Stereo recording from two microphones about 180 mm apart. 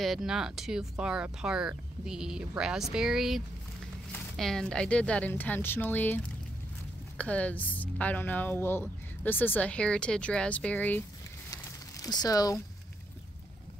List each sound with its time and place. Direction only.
0.0 s a woman's voice: centre (ahead or behind)
11.5 s crumpling: 20° left (ahead or behind)